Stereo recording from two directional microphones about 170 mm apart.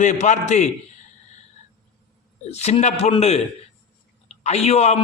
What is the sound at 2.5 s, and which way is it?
A man's voice, 40° left (ahead or behind).